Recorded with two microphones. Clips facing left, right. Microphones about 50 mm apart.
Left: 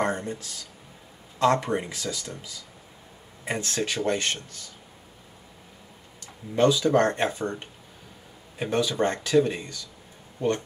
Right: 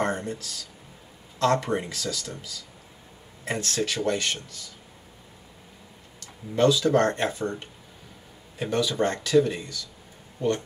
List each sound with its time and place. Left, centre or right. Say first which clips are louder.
0.0 s speech: even; centre
3.4 s speech: right 1 dB; centre
6.5 s speech: even; centre